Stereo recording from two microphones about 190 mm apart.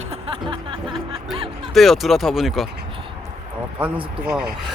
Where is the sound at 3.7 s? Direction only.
10° right (ahead or behind).